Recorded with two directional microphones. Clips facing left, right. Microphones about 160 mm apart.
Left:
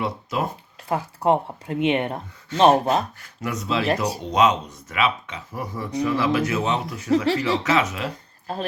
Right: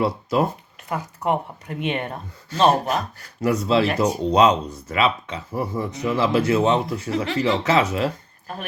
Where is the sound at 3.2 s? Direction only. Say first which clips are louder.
Right 8 dB; 35° right (ahead or behind).